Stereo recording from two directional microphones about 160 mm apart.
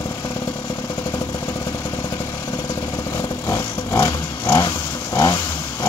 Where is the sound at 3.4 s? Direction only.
20° left (ahead or behind).